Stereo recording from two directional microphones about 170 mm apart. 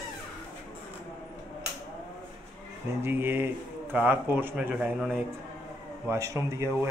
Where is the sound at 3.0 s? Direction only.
10° right (ahead or behind).